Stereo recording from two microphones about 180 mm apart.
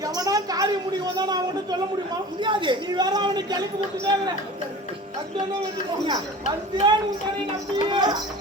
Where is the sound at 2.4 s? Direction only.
25° right (ahead or behind).